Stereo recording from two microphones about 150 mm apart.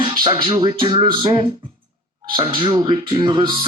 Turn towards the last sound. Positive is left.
turn(degrees=-35)  # may be behind; listen again after turning